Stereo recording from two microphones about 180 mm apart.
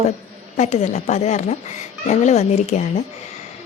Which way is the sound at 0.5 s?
40° left (ahead or behind).